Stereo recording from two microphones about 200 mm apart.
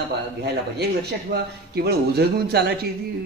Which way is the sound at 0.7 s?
50° right (ahead or behind).